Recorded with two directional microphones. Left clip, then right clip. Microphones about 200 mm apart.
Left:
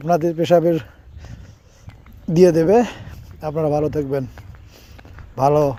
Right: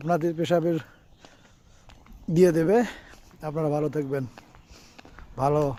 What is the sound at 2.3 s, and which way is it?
Speech, 15° left (ahead or behind).